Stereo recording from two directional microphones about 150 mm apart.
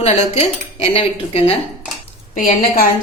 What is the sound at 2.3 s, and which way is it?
Speech, 60° left (ahead or behind).